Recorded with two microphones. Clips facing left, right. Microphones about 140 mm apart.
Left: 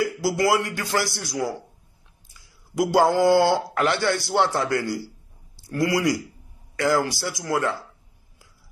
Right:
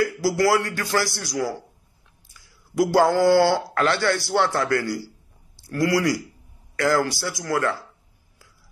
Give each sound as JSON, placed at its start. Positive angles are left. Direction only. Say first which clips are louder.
{"t": 0.0, "sound": "a man's voice", "louder": "right 2 dB", "side_deg": 20}